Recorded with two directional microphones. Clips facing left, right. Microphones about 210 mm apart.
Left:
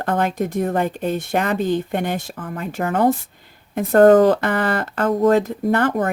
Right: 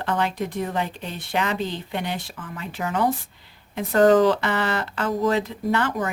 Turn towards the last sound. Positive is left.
turn(degrees=55)  # may be behind; listen again after turning